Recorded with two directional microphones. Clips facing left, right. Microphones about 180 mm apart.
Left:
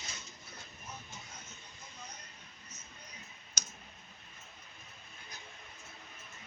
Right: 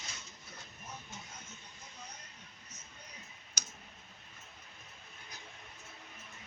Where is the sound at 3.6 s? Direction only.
10° right (ahead or behind).